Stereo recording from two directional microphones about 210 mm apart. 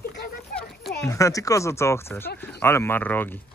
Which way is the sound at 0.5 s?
Centre (ahead or behind).